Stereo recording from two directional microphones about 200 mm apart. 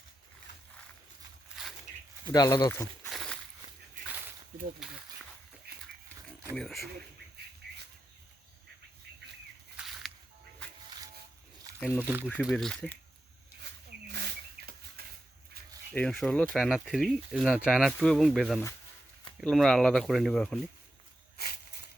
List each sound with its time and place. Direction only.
2.2 s speech: 20° left (ahead or behind)
3.1 s walk: centre (ahead or behind)
4.8 s speech: 5° right (ahead or behind)
6.5 s speech: centre (ahead or behind)
9.7 s a sound: centre (ahead or behind)
10.8 s music: 20° right (ahead or behind)
12.0 s speech: 10° right (ahead or behind)
14.1 s bird: 55° right (ahead or behind)
15.9 s speech: 5° left (ahead or behind)